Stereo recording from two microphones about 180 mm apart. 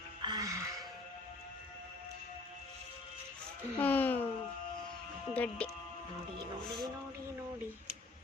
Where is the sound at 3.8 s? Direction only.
10° left (ahead or behind).